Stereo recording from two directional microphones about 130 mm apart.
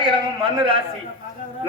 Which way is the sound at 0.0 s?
40° right (ahead or behind).